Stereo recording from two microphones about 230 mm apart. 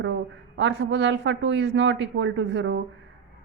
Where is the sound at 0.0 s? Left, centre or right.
Right.